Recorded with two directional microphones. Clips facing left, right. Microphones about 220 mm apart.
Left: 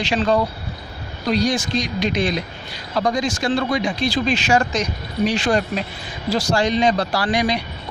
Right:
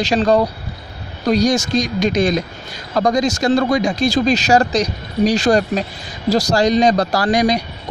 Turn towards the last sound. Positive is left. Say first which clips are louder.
# right 5 dB
turn(degrees=-40)  # may be behind; listen again after turning